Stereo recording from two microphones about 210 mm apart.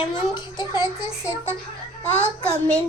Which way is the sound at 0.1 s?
20° left (ahead or behind).